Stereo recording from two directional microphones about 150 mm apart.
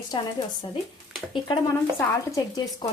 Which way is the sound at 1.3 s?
30° left (ahead or behind).